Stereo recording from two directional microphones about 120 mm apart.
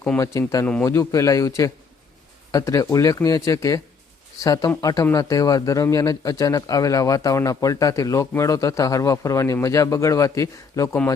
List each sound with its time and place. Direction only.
0.2 s speech: 25° left (ahead or behind)